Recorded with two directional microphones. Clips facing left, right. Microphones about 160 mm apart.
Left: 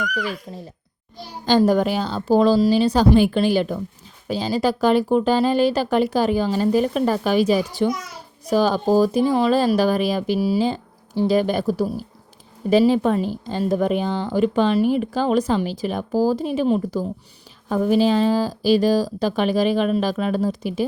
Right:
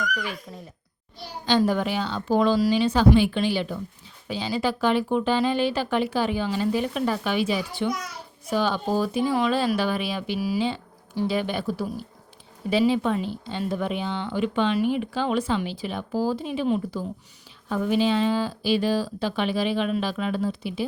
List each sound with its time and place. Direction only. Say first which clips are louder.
0.0 s speech: left 4 dB; 35° left (ahead or behind)